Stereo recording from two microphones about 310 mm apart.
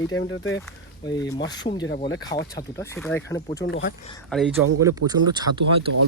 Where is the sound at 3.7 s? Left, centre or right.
Left.